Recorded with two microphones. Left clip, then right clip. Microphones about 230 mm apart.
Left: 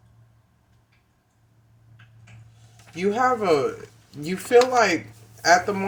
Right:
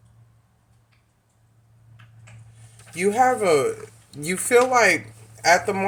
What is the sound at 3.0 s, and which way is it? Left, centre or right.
Speech, right.